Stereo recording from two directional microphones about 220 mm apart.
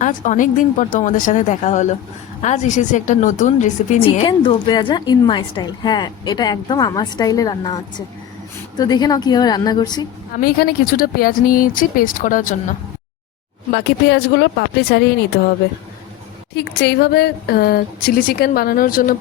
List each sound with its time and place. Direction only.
0.0 s a woman's voice: 35° left (ahead or behind); by 10.1 s 20° left (ahead or behind)
10.3 s a woman's voice: 40° left (ahead or behind)
13.7 s a woman's voice: 50° left (ahead or behind)
16.6 s a woman's voice: 50° left (ahead or behind)